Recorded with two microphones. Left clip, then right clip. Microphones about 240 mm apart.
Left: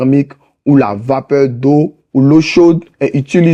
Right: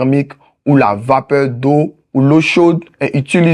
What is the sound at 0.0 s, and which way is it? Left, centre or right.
Speech, right.